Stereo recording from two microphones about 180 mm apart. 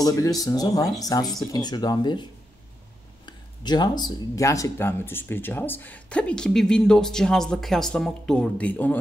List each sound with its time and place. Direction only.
0.0 s speech: 20° left (ahead or behind)
3.3 s speech: 25° left (ahead or behind); by 8.9 s 10° left (ahead or behind)